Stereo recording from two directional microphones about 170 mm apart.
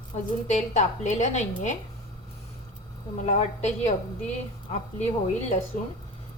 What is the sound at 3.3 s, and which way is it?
A woman's voice, 40° left (ahead or behind).